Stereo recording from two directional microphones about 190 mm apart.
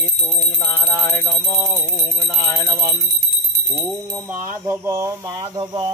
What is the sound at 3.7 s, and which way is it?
Speech, 10° right (ahead or behind).